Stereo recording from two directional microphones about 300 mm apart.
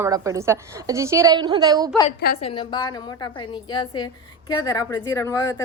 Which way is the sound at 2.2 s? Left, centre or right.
Centre.